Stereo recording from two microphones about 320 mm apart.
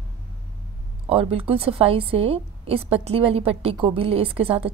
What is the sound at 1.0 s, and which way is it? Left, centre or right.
A woman's voice, centre.